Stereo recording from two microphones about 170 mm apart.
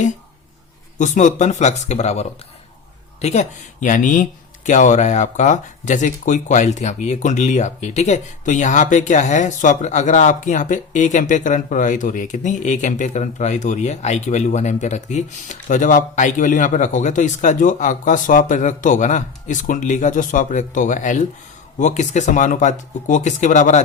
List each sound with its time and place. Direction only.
0.9 s speech: 45° left (ahead or behind)